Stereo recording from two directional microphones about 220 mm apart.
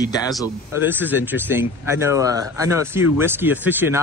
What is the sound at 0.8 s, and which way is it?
Speech, 10° right (ahead or behind).